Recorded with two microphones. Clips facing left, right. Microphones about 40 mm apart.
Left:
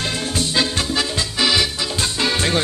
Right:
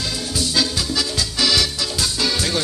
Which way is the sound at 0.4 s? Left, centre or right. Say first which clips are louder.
Even; left.